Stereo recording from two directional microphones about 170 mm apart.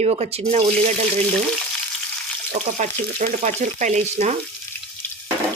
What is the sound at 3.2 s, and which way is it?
Frying, 45° right (ahead or behind).